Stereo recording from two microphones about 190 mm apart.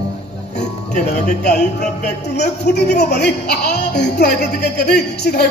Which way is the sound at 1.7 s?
60° left (ahead or behind).